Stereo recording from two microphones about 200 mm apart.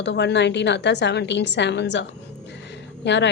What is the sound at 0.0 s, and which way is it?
A woman's voice, 60° left (ahead or behind).